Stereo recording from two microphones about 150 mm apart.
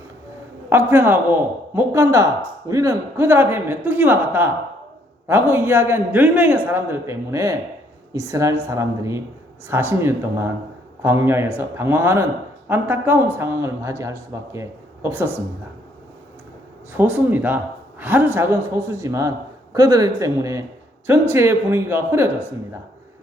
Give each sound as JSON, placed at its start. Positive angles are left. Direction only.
{"t": 0.7, "sound": "speech", "side_deg": -15}
{"t": 17.0, "sound": "speech", "side_deg": -10}